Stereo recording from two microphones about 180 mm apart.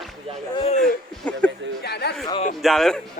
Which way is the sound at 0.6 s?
35° left (ahead or behind).